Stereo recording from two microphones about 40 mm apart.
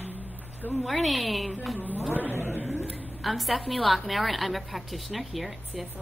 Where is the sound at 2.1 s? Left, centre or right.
Right.